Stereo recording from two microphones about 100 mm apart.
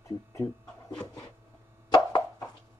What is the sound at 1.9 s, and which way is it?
Plop, 45° left (ahead or behind).